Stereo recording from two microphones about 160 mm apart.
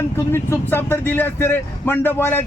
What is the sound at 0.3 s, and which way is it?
A man's voice, 15° left (ahead or behind).